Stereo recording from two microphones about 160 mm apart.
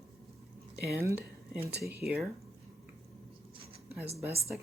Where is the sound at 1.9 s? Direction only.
5° right (ahead or behind).